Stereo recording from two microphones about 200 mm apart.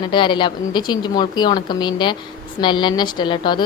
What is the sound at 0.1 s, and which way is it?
A woman's voice, 25° left (ahead or behind).